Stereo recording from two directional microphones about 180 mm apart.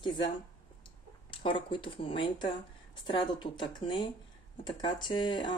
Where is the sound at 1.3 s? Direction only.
30° left (ahead or behind).